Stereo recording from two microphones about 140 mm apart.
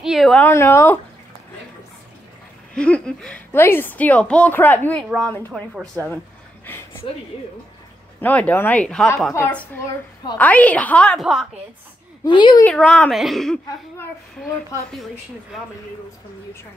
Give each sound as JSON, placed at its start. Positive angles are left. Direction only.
{"t": 0.0, "sound": "a sound", "side_deg": 0}
{"t": 0.4, "sound": "a woman's voice", "side_deg": 15}
{"t": 2.7, "sound": "a woman's voice", "side_deg": 5}
{"t": 6.6, "sound": "a sound", "side_deg": 15}
{"t": 8.2, "sound": "a woman's voice", "side_deg": 10}
{"t": 12.3, "sound": "a woman's voice", "side_deg": 35}
{"t": 12.6, "sound": "a woman's voice", "side_deg": 5}
{"t": 15.5, "sound": "a woman's voice", "side_deg": -5}